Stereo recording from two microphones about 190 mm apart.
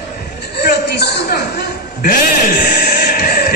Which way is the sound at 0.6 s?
60° left (ahead or behind).